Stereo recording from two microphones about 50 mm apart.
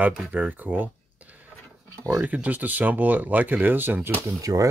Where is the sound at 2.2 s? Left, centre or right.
Right.